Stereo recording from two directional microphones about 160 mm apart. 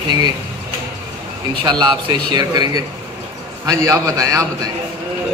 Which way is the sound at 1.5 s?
25° right (ahead or behind).